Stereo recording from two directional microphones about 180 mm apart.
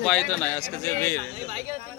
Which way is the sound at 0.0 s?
Centre (ahead or behind).